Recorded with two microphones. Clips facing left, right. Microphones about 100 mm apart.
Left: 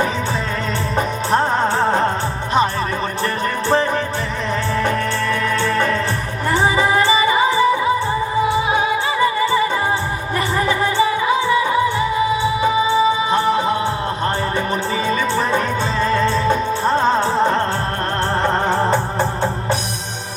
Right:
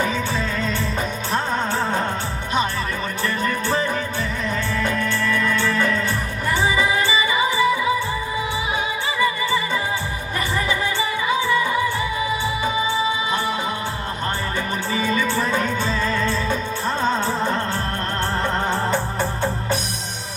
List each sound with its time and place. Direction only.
0.9 s music: 40° left (ahead or behind)
4.8 s music: 45° left (ahead or behind)
9.2 s music: 45° left (ahead or behind)
10.7 s music: 45° left (ahead or behind)
13.3 s music: 35° left (ahead or behind)
15.0 s music: 25° left (ahead or behind)
16.0 s music: 35° left (ahead or behind)
18.4 s music: 40° left (ahead or behind)